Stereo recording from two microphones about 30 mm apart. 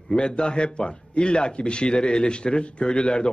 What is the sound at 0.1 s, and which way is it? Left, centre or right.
A man's voice, left.